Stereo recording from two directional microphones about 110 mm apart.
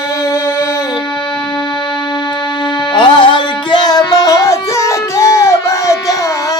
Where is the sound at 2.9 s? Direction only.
50° left (ahead or behind); by 5.9 s 25° left (ahead or behind).